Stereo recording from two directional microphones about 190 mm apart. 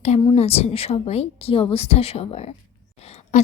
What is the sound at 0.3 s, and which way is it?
A woman's voice, 30° left (ahead or behind).